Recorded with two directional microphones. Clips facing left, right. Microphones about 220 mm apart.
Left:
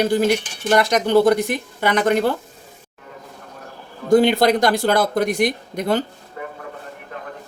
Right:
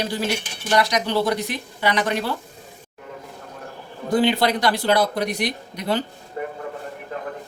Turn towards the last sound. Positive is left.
turn(degrees=-30)  # may be behind; listen again after turning